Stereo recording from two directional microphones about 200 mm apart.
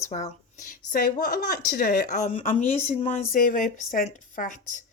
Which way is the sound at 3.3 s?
45° left (ahead or behind).